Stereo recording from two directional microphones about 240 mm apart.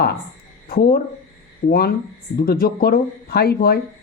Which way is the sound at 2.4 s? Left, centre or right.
Left.